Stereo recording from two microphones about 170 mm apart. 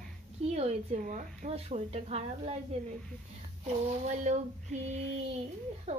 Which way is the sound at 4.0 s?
45° right (ahead or behind).